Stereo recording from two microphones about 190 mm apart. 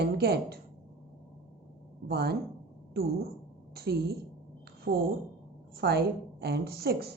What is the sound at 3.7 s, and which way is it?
A woman's voice, 55° right (ahead or behind).